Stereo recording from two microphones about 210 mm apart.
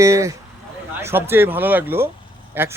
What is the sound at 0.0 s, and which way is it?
Speech, 15° right (ahead or behind).